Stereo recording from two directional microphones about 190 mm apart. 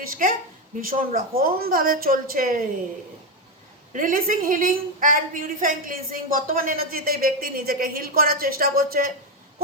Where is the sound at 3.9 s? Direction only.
45° right (ahead or behind).